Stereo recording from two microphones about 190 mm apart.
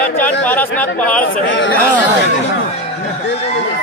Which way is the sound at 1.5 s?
75° left (ahead or behind).